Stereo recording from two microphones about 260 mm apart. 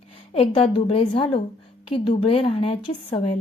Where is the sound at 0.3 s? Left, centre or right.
Left.